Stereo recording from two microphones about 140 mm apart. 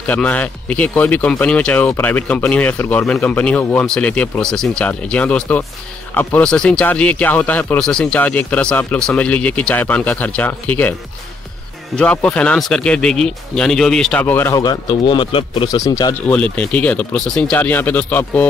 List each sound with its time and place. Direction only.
0.0 s speech: 10° left (ahead or behind)
12.0 s speech: 10° left (ahead or behind)
14.5 s speech: 30° left (ahead or behind)
15.8 s speech: 25° left (ahead or behind)
16.3 s speech: 10° left (ahead or behind)